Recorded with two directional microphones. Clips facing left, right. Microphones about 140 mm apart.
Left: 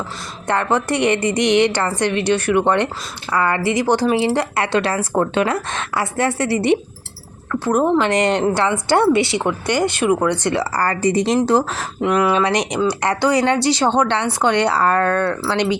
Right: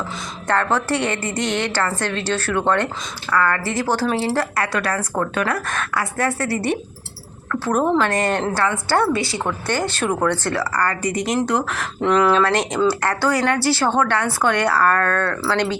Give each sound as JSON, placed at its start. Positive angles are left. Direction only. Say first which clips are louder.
{"t": 0.4, "sound": "a woman's voice", "louder": "left 1 dB", "side_deg": 15}
{"t": 10.4, "sound": "speech", "louder": "left 2 dB", "side_deg": 20}
{"t": 11.9, "sound": "a woman's voice", "louder": "even", "side_deg": 10}